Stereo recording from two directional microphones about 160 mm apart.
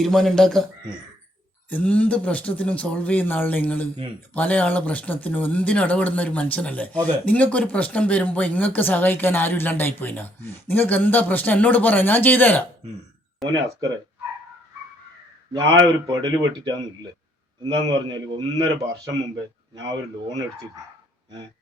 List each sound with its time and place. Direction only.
0.0 s speech: centre (ahead or behind)
1.7 s speech: 10° left (ahead or behind)
13.4 s speech: centre (ahead or behind)
15.5 s speech: 25° right (ahead or behind)
18.5 s speech: 20° right (ahead or behind)